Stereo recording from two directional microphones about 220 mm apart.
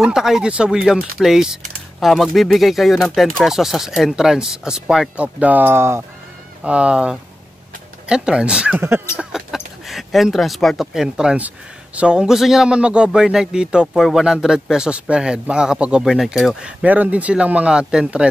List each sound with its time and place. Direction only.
0.0 s speech: centre (ahead or behind)